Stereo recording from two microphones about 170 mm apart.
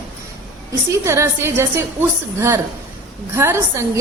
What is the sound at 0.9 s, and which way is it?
A woman's voice, 15° right (ahead or behind).